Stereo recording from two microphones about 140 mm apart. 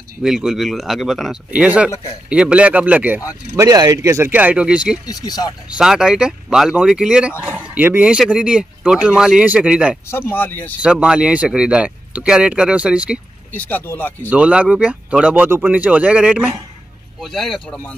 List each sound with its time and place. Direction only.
0.2 s speech: 5° right (ahead or behind)
3.5 s speech: 25° right (ahead or behind); by 4.9 s 5° right (ahead or behind)
5.0 s speech: 25° left (ahead or behind)
5.7 s speech: 5° right (ahead or behind)
10.3 s speech: 15° left (ahead or behind)
10.8 s speech: 5° right (ahead or behind)
13.5 s speech: 15° left (ahead or behind)
14.3 s speech: 10° right (ahead or behind)